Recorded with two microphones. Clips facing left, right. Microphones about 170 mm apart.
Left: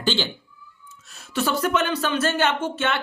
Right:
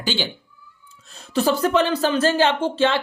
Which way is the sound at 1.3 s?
35° right (ahead or behind).